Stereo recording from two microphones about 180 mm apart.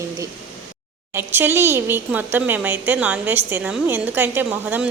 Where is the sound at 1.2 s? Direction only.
10° right (ahead or behind).